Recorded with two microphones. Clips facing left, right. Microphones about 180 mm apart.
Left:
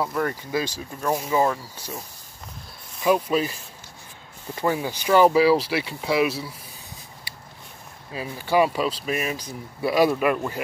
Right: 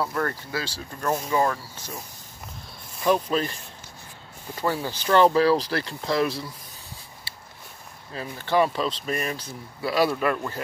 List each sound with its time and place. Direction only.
0.0 s speech: 10° left (ahead or behind)
3.0 s speech: 10° left (ahead or behind)
4.6 s speech: 15° left (ahead or behind)
8.1 s speech: 10° left (ahead or behind)